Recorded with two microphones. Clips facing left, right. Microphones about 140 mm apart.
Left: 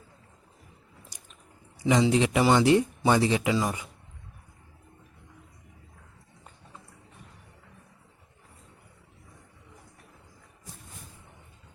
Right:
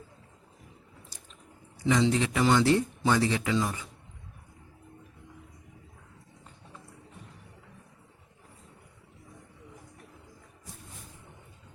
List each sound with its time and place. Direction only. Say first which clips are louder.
1.9 s speech: left 3 dB; 15° left (ahead or behind)